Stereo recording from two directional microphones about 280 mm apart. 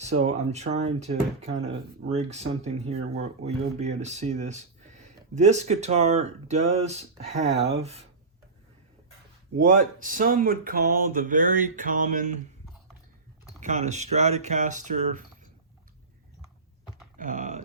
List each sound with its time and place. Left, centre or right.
0.0 s speech: right
9.6 s speech: right
13.6 s speech: right
17.2 s typing: right